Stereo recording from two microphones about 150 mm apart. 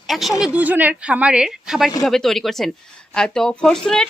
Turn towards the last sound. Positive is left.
turn(degrees=5)  # may be behind; listen again after turning